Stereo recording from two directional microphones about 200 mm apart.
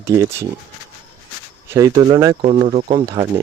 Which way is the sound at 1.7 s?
15° right (ahead or behind).